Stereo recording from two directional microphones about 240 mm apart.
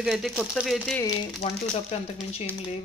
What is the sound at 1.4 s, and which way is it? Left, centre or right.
Speech, left.